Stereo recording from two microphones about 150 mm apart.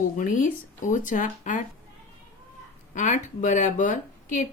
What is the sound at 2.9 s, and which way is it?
Speech, 55° left (ahead or behind).